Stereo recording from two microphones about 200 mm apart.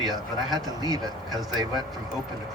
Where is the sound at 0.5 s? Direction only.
20° right (ahead or behind).